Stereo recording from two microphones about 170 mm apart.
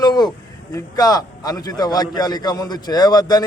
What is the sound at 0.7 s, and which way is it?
A man's voice, 20° left (ahead or behind).